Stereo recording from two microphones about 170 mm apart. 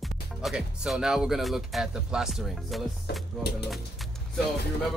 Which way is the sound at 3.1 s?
70° left (ahead or behind).